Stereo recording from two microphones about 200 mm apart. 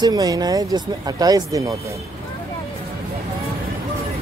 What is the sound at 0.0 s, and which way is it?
Speech, 20° right (ahead or behind).